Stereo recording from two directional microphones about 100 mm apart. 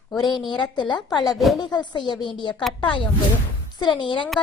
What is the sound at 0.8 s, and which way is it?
Speech, 50° left (ahead or behind).